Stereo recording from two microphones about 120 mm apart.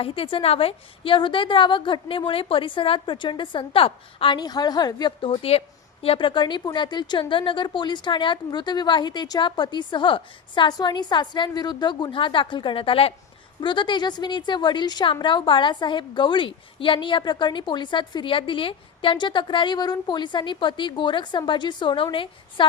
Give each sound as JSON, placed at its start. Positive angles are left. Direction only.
{"t": 0.0, "sound": "a woman's voice", "side_deg": 50}
{"t": 13.6, "sound": "a woman's voice", "side_deg": 40}